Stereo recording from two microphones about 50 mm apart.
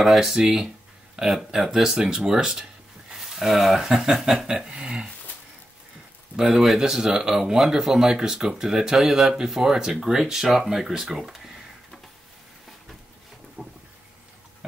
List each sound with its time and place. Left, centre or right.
0.0 s speech: centre
6.3 s speech: centre
13.6 s a sound: right